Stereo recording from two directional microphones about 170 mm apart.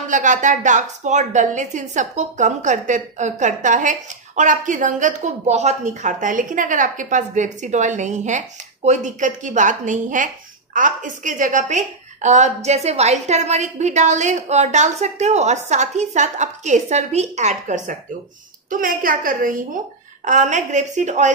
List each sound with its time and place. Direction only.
0.1 s a woman's voice: 45° right (ahead or behind)